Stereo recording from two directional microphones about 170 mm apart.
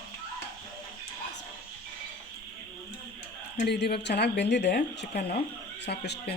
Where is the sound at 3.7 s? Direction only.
75° left (ahead or behind).